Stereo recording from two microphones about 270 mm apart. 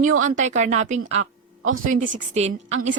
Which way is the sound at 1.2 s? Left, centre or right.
Right.